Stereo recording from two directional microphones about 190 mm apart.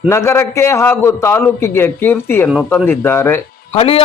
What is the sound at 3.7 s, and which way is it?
Speech, 30° left (ahead or behind).